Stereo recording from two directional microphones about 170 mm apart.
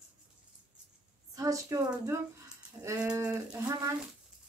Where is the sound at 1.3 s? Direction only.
20° right (ahead or behind).